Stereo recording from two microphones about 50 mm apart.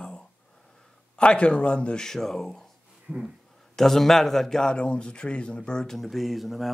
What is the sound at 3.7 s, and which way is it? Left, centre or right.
Speech, centre.